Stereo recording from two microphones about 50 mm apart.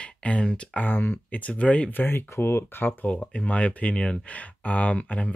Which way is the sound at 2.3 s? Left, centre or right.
Left.